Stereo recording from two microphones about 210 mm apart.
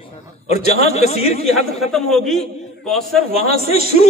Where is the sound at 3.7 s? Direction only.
30° left (ahead or behind).